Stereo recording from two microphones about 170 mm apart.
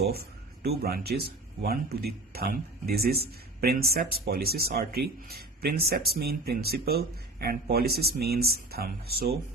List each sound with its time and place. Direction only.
0.8 s a man's voice: 65° right (ahead or behind)